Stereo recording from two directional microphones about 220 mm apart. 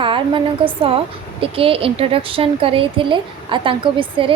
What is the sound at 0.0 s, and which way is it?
A woman's voice, 25° right (ahead or behind).